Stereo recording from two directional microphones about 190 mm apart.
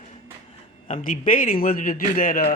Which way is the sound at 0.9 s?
45° left (ahead or behind).